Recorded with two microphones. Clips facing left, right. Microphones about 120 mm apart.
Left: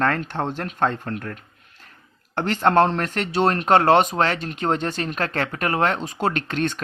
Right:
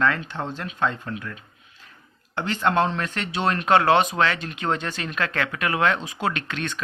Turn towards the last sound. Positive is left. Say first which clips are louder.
# left 5 dB
turn(degrees=45)  # may be behind; listen again after turning